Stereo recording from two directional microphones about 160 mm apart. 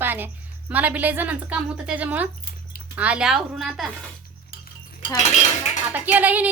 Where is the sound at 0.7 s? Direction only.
10° right (ahead or behind).